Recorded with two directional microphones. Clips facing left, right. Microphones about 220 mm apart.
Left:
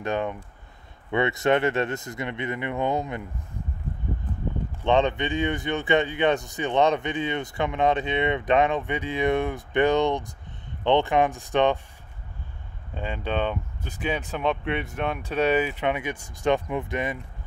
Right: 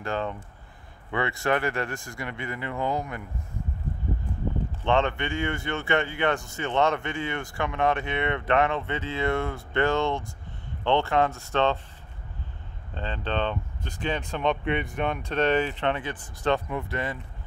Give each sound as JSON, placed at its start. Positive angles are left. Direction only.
{"t": 0.0, "sound": "speech", "side_deg": 15}
{"t": 4.8, "sound": "speech", "side_deg": 20}
{"t": 12.9, "sound": "speech", "side_deg": 10}